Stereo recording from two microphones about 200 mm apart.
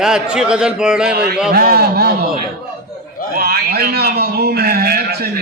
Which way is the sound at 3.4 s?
50° right (ahead or behind).